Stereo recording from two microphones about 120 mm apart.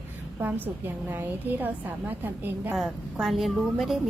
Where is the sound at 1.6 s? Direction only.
15° right (ahead or behind).